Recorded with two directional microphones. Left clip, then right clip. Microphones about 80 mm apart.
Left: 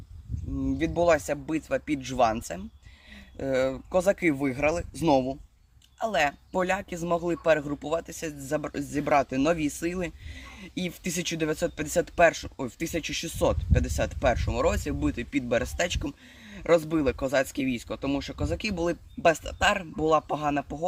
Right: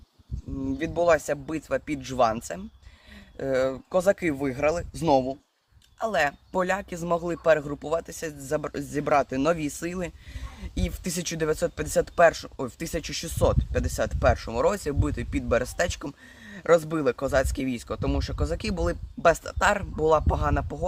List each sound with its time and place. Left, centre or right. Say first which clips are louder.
0.6 s speech: even; right
6.0 s speech: right 1 dB; right